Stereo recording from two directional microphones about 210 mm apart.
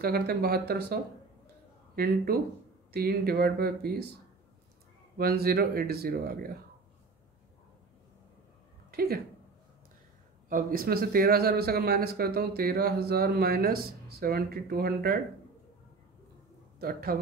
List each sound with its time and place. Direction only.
0.0 s a man's voice: 45° right (ahead or behind)
2.0 s a man's voice: 45° right (ahead or behind)
5.1 s a man's voice: 45° right (ahead or behind)
8.9 s a woman's voice: 45° right (ahead or behind)
10.5 s a man's voice: 45° right (ahead or behind)
16.8 s a man's voice: 45° right (ahead or behind)